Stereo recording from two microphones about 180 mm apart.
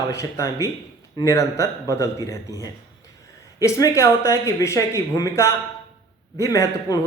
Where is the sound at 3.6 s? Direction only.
20° left (ahead or behind).